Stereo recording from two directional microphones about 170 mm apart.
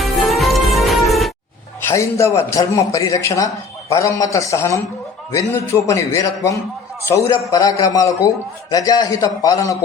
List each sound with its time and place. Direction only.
0.0 s music: centre (ahead or behind)
1.9 s a man's voice: 15° left (ahead or behind)